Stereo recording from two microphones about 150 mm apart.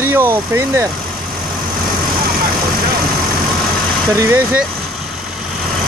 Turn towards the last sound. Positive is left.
turn(degrees=-20)  # may be behind; listen again after turning